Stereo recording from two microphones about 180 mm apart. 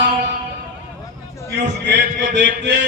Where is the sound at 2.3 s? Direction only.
75° right (ahead or behind).